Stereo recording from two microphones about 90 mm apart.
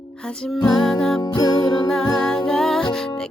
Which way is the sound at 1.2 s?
55° left (ahead or behind).